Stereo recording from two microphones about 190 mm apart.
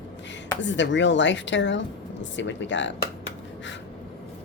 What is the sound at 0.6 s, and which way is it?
Speech, 70° left (ahead or behind).